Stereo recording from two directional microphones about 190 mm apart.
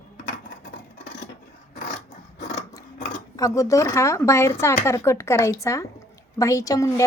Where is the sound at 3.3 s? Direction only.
15° left (ahead or behind).